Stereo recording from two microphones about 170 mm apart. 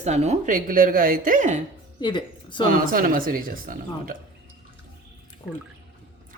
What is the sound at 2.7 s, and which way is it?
Speech, 55° right (ahead or behind).